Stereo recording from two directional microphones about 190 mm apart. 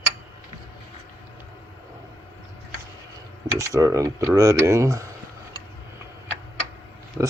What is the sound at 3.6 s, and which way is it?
Speech, 20° right (ahead or behind).